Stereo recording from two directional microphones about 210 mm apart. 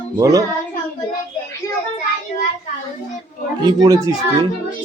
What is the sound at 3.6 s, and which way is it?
Speech, 15° right (ahead or behind).